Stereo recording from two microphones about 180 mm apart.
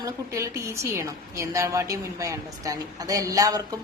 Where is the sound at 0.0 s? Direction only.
15° right (ahead or behind).